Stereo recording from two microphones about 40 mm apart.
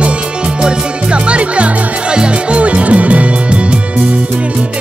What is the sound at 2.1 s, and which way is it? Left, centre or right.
Music, right.